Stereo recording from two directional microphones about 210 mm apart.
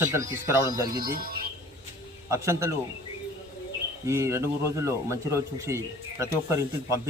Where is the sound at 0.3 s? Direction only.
15° right (ahead or behind).